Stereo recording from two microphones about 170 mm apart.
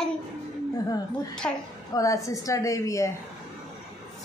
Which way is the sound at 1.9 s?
20° left (ahead or behind).